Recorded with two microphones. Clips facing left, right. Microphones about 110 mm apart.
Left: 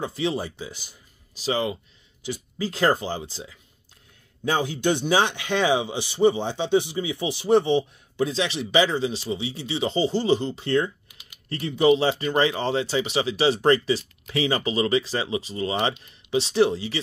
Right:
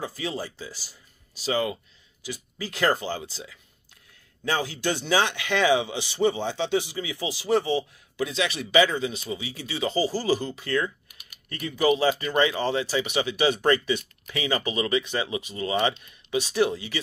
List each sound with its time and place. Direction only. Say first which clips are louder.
0.0 s speech: left 5 dB; 25° left (ahead or behind)